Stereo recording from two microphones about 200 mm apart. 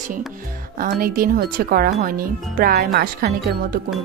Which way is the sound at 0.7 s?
45° right (ahead or behind).